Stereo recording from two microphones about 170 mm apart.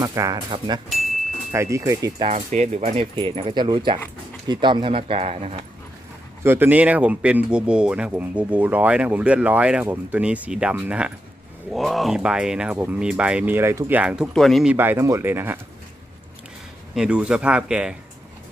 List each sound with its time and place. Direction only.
0.0 s speech: 20° right (ahead or behind)
1.5 s speech: 15° right (ahead or behind)
2.2 s speech: 40° right (ahead or behind)
6.4 s speech: 15° right (ahead or behind)
16.9 s speech: 5° right (ahead or behind)